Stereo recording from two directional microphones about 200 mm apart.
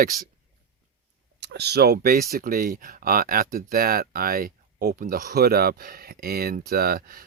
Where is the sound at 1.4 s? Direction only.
55° right (ahead or behind).